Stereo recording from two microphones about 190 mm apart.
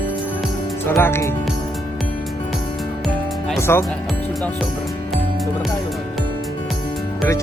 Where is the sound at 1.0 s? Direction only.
10° left (ahead or behind).